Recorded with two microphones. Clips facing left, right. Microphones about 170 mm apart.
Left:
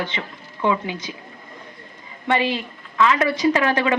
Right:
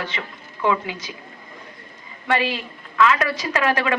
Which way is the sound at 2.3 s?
25° left (ahead or behind).